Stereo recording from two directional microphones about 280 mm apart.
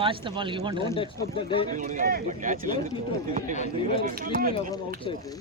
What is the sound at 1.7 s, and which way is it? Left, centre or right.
Speech, right.